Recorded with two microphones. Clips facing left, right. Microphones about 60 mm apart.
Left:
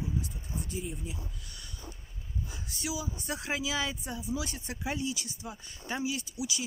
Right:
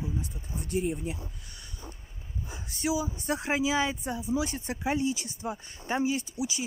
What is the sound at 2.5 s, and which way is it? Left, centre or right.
Speech, right.